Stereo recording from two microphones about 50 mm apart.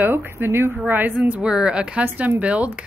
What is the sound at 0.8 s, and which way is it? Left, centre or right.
Speech, right.